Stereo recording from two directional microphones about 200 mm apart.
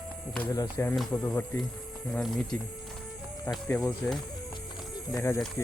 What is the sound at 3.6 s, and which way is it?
Speech, 10° left (ahead or behind).